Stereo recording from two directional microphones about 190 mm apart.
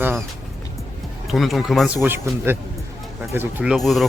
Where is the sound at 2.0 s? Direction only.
10° right (ahead or behind).